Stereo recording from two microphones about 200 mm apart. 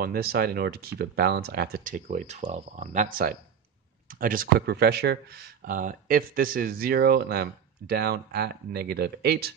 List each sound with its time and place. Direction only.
0.0 s speech: 50° right (ahead or behind)